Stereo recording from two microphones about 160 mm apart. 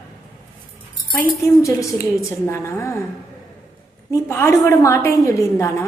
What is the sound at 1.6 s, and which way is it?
A woman's voice, 20° left (ahead or behind).